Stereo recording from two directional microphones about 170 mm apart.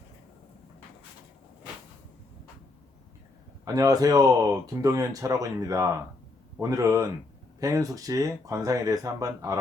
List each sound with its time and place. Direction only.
3.7 s speech: 20° right (ahead or behind)